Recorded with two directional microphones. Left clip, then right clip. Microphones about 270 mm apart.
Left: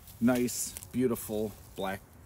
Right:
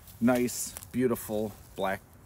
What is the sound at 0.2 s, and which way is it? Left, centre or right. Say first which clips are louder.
Speech: right 2 dB; centre.